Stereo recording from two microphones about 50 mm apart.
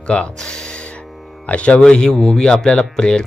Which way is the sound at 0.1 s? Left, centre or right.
Centre.